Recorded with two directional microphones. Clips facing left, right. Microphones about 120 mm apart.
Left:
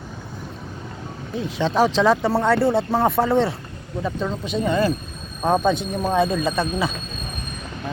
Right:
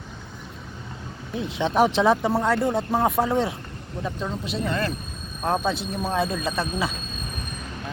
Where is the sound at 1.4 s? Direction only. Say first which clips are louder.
Left 1 dB; 20° right (ahead or behind); by 5.6 s 10° left (ahead or behind).